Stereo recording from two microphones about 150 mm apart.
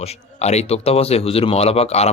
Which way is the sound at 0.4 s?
45° left (ahead or behind).